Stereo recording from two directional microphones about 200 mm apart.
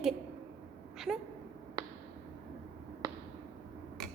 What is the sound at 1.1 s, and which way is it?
Speech, 15° right (ahead or behind).